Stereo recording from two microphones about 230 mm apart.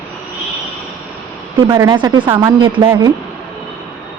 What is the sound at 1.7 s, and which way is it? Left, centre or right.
A woman's voice, centre.